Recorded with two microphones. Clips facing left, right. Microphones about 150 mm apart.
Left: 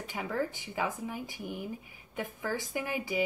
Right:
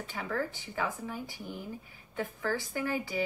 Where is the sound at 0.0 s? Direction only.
15° left (ahead or behind).